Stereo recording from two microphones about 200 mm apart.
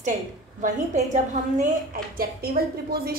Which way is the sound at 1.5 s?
45° right (ahead or behind).